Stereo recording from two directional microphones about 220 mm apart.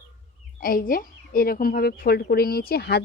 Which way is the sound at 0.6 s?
40° left (ahead or behind).